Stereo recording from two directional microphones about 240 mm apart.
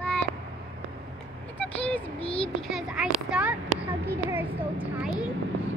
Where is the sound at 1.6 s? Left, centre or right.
Centre.